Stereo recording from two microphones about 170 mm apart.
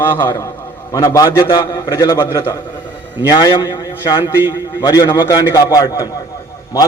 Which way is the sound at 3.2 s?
25° left (ahead or behind).